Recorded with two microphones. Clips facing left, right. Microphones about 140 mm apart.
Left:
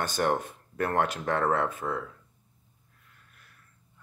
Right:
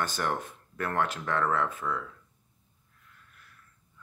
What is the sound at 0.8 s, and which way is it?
Speech, 35° left (ahead or behind).